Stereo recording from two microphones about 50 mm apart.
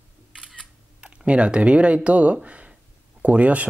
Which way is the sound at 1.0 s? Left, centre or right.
Right.